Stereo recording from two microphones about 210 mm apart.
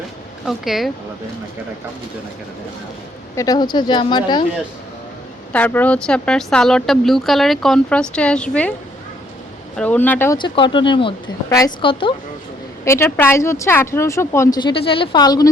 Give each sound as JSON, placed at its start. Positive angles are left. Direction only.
{"t": 0.4, "sound": "speech", "side_deg": 0}
{"t": 3.3, "sound": "speech", "side_deg": 15}
{"t": 5.5, "sound": "speech", "side_deg": 10}
{"t": 9.7, "sound": "speech", "side_deg": 5}
{"t": 10.3, "sound": "speech", "side_deg": 20}
{"t": 12.8, "sound": "speech", "side_deg": 10}